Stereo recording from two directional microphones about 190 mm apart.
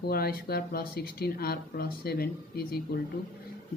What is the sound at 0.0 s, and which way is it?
Speech, 55° left (ahead or behind).